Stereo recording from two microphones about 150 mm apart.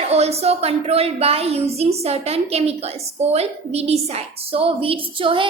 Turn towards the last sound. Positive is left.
turn(degrees=-35)  # may be behind; listen again after turning